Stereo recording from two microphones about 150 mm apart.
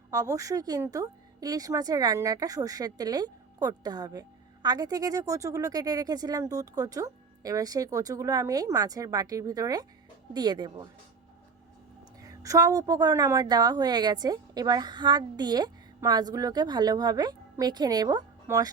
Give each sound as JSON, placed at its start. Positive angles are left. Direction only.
{"t": 0.1, "sound": "speech", "side_deg": -25}
{"t": 12.2, "sound": "speech", "side_deg": -20}